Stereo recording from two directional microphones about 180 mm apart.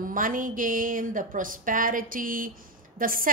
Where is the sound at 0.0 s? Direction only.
50° right (ahead or behind).